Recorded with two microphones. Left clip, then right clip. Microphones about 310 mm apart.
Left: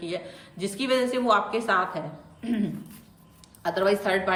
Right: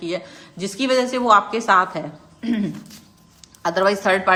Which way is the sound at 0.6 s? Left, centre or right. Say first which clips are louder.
Right 5 dB; centre.